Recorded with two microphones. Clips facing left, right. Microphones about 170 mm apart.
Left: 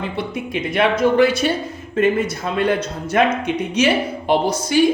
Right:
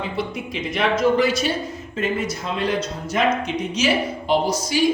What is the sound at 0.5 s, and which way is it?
A man's voice, 60° left (ahead or behind).